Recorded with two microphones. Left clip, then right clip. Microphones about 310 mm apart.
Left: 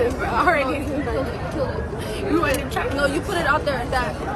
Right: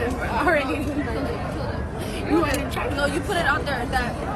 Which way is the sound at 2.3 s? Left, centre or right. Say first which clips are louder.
Left 1 dB; centre.